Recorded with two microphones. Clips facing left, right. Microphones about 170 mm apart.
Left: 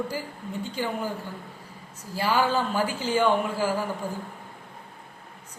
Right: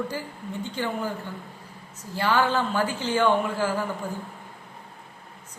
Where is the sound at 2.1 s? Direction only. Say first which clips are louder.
Right 1 dB; 10° left (ahead or behind).